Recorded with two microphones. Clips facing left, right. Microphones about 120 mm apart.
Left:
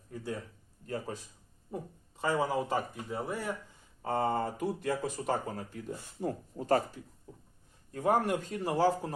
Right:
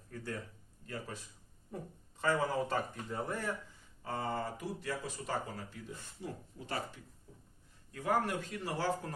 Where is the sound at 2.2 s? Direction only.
15° left (ahead or behind).